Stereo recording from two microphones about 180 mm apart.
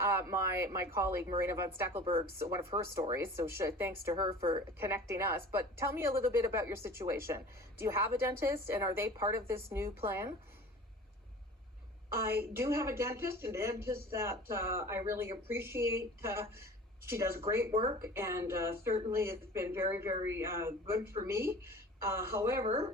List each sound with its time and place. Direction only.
0.0 s a woman's voice: 15° right (ahead or behind)
12.1 s a woman's voice: 15° right (ahead or behind)
22.6 s speech: 30° right (ahead or behind)